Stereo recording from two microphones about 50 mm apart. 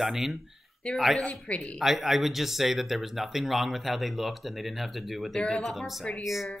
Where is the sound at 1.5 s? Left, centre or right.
Left.